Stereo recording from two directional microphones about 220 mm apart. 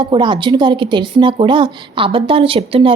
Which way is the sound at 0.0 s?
20° right (ahead or behind).